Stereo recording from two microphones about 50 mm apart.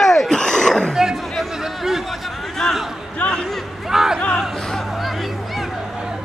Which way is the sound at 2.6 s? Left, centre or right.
Centre.